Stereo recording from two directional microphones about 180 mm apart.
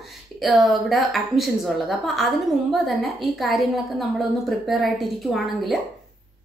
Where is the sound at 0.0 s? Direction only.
Centre (ahead or behind).